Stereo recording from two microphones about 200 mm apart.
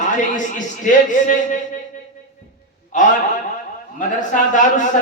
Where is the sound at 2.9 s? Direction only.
40° left (ahead or behind).